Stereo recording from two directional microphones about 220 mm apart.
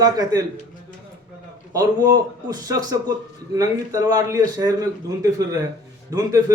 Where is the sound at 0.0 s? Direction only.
15° right (ahead or behind).